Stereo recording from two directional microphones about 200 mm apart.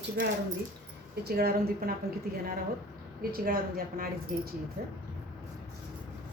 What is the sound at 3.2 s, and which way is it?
Speech, 45° right (ahead or behind).